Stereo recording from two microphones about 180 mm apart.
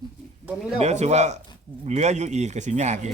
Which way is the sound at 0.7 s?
40° right (ahead or behind).